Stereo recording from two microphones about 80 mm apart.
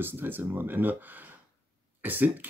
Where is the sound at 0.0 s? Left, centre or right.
Right.